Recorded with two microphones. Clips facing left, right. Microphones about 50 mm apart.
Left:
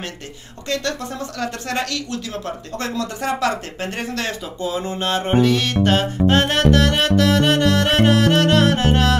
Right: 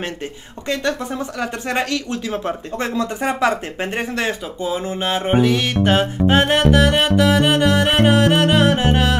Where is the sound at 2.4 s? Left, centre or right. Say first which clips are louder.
Right 3 dB; centre.